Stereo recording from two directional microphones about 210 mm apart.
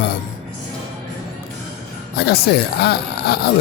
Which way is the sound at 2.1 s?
50° left (ahead or behind).